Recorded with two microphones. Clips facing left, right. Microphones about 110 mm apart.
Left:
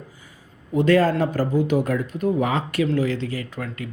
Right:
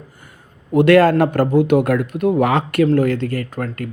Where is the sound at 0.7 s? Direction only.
70° right (ahead or behind).